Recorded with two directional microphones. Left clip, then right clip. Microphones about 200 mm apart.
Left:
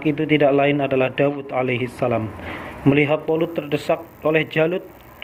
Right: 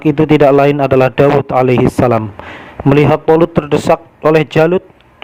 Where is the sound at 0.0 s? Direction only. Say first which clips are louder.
Right 9 dB; 55° right (ahead or behind).